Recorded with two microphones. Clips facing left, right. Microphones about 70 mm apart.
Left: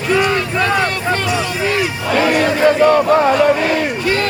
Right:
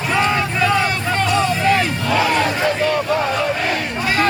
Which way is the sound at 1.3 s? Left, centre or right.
Centre.